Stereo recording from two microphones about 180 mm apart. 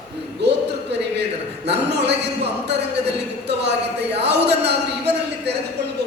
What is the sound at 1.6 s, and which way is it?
Speech, 70° right (ahead or behind).